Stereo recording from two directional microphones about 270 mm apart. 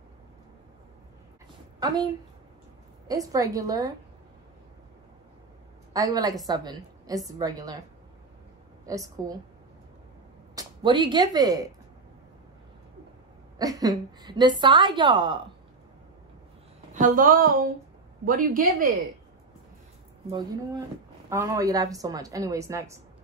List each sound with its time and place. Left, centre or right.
3.1 s a woman's voice: centre
5.9 s a woman's voice: centre
8.8 s a woman's voice: centre
10.5 s speech: centre
13.6 s a woman's voice: centre
16.9 s a woman's voice: right
20.2 s a woman's voice: centre